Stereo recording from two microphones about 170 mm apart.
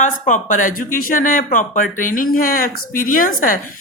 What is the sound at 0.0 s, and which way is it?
A woman's voice, 50° left (ahead or behind).